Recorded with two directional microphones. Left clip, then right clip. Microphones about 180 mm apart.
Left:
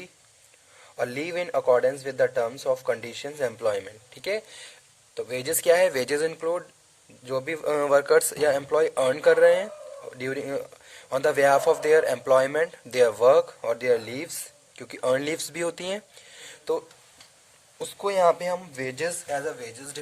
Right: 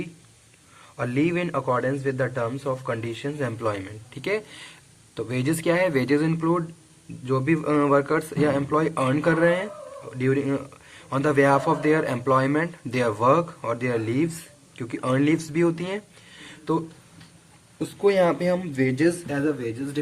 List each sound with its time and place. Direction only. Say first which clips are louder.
0.9 s speech: right 3 dB; 55° left (ahead or behind)
18.2 s speech: even; 35° left (ahead or behind)
19.3 s speech: right 3 dB; 60° left (ahead or behind)